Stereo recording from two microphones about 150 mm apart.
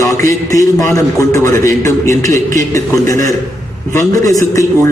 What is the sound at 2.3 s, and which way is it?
Speech, 55° right (ahead or behind).